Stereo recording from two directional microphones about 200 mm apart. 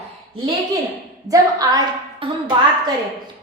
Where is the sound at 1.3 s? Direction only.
20° right (ahead or behind).